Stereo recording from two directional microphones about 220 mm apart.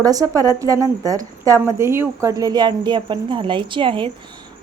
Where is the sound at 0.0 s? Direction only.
15° right (ahead or behind).